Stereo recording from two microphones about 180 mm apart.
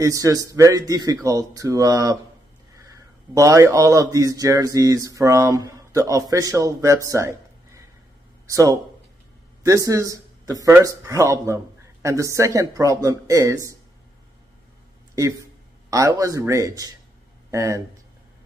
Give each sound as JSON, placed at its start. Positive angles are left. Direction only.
{"t": 0.0, "sound": "a man's voice", "side_deg": -20}
{"t": 15.9, "sound": "speech", "side_deg": -20}